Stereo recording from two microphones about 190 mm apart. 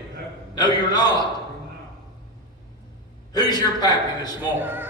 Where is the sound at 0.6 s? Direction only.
20° left (ahead or behind).